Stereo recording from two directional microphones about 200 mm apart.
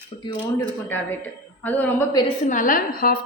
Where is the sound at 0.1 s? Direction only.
30° left (ahead or behind).